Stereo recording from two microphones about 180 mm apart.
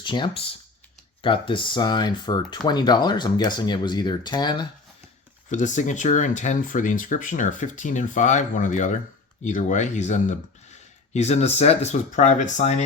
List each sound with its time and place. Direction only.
0.0 s speech: 25° left (ahead or behind)
5.5 s speech: 40° left (ahead or behind)